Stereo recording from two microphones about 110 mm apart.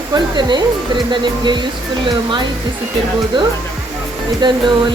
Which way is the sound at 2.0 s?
45° right (ahead or behind).